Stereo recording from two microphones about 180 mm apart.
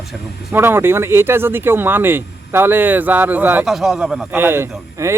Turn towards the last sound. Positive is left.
turn(degrees=-15)  # may be behind; listen again after turning